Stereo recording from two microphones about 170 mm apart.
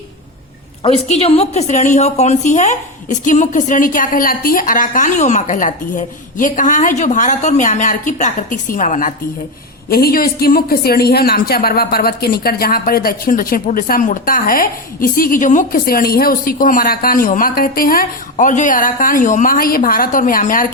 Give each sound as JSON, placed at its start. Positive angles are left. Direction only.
{"t": 0.8, "sound": "a woman's voice", "side_deg": 35}
{"t": 9.9, "sound": "speech", "side_deg": 60}